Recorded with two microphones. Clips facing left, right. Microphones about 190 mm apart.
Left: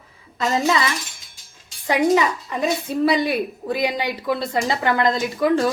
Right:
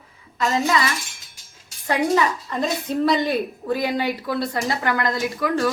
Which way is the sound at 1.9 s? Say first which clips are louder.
Left 2 dB; 15° left (ahead or behind).